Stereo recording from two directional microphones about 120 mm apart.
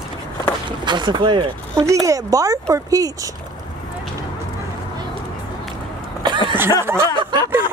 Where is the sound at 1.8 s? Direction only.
25° right (ahead or behind).